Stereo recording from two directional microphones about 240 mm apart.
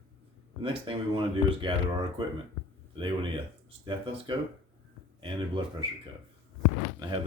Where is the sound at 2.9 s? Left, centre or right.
Centre.